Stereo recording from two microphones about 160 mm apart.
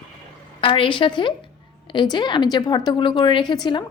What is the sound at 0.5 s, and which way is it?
A woman's voice, 35° left (ahead or behind).